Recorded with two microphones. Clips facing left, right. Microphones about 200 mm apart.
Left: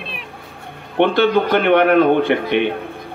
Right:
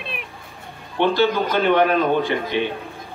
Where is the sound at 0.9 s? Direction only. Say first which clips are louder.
Left 4 dB; 60° left (ahead or behind).